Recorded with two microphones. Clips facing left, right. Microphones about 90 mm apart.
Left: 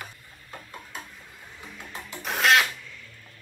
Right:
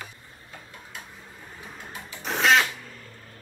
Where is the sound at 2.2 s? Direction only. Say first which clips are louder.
Right 1 dB; centre (ahead or behind).